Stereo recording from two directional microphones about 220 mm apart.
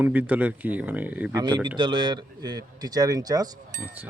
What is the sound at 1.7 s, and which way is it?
Speech, 20° right (ahead or behind).